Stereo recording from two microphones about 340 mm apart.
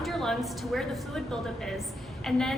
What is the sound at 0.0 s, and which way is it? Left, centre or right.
A woman's voice, centre.